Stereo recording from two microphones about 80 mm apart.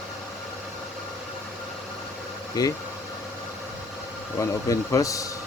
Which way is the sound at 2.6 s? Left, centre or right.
Left.